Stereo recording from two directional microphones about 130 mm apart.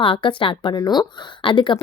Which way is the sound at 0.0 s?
40° left (ahead or behind).